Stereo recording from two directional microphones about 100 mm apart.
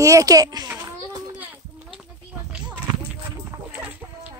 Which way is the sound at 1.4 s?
15° right (ahead or behind).